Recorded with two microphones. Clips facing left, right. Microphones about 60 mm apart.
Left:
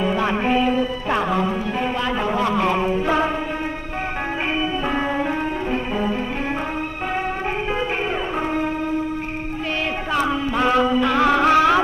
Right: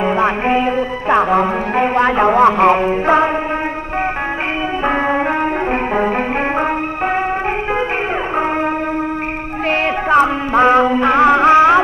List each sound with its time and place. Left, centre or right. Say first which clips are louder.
0.0 s music: right 5 dB; right
5.7 s music: right 6 dB; right
10.1 s music: right 8 dB; right